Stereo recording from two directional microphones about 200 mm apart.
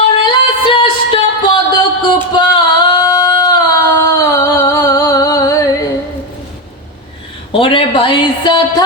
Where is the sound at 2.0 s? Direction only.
20° left (ahead or behind).